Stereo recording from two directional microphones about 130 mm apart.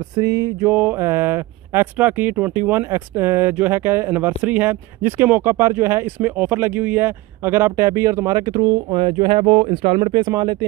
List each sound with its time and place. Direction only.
0.1 s speech: 25° right (ahead or behind)